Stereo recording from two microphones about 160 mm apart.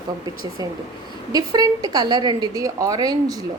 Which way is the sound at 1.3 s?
25° right (ahead or behind).